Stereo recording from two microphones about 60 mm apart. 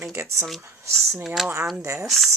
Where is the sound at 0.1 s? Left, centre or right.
Right.